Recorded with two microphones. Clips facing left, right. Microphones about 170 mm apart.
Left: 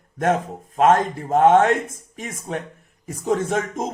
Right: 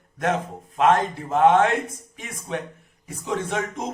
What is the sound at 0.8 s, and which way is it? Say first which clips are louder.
Speech: left 3 dB; 45° left (ahead or behind).